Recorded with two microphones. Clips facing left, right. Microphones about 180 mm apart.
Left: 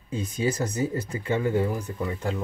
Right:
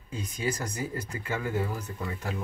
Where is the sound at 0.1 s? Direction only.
25° left (ahead or behind).